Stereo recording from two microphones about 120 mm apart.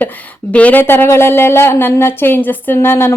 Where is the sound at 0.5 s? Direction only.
15° left (ahead or behind).